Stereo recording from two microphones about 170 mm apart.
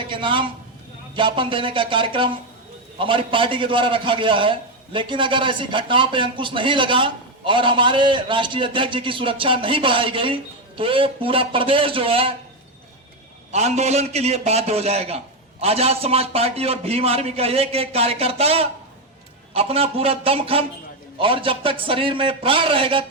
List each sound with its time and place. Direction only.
0.0 s a sound: 30° right (ahead or behind)
1.1 s a man's voice: 30° right (ahead or behind)
13.5 s a man's voice: 40° right (ahead or behind)